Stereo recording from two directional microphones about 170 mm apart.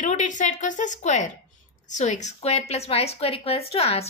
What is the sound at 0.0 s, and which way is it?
A woman's voice, 45° left (ahead or behind).